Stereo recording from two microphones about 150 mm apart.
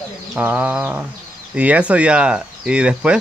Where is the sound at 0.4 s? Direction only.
10° right (ahead or behind).